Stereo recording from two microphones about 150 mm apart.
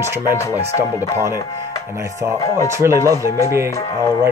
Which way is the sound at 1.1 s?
15° right (ahead or behind).